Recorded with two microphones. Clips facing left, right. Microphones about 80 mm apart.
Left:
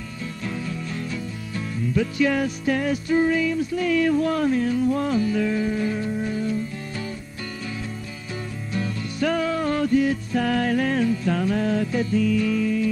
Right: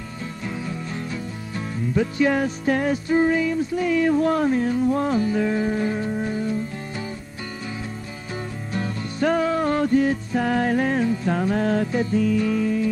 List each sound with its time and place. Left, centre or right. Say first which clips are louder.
2.0 s music: right 1 dB; right
8.7 s music: even; right
10.3 s music: right 1 dB; right
11.6 s music: right 1 dB; right
11.9 s music: right 1 dB; right